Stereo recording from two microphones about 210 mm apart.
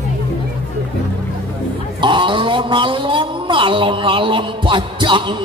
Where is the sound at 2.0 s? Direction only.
25° right (ahead or behind).